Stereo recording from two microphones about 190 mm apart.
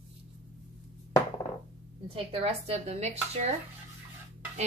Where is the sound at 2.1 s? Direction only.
35° right (ahead or behind).